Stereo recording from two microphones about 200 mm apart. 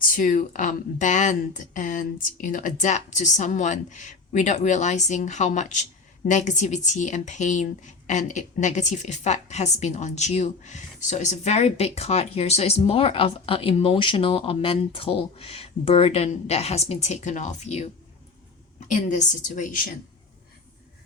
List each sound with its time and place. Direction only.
0.0 s speech: 40° left (ahead or behind)